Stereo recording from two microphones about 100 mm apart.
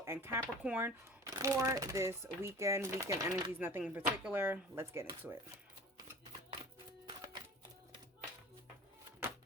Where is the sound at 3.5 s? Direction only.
20° right (ahead or behind).